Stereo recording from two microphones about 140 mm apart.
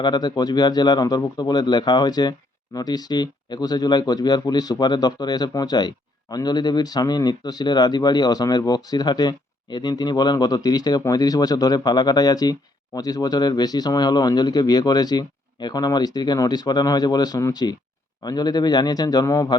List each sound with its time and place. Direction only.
0.0 s speech: 30° left (ahead or behind)